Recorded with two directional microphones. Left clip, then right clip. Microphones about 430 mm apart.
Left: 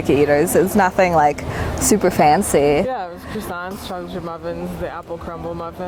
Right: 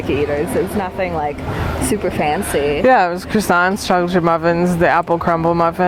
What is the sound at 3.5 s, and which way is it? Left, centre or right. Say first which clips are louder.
Speech: right 15 dB; right.